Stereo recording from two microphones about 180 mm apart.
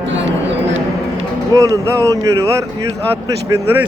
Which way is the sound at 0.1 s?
90° right.